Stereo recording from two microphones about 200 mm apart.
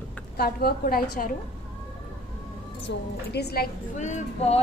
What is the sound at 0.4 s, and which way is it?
Speech, 50° left (ahead or behind).